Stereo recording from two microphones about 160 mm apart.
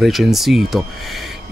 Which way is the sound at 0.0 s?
Centre (ahead or behind).